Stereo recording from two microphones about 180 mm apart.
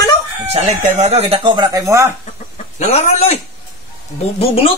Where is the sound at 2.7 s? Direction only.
35° left (ahead or behind).